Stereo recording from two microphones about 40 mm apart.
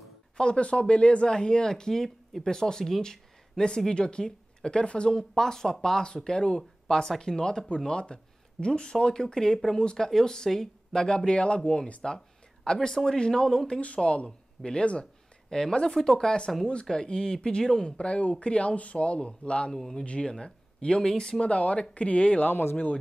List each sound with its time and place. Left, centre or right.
0.4 s speech: left
5.1 s speech: centre; by 11.8 s left
12.0 s speech: centre
13.7 s speech: left
19.7 s speech: centre
21.5 s speech: left